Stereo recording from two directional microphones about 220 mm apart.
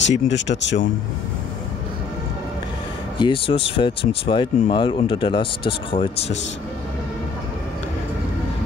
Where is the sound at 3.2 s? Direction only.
25° left (ahead or behind).